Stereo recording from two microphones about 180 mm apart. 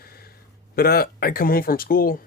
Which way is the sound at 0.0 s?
55° left (ahead or behind).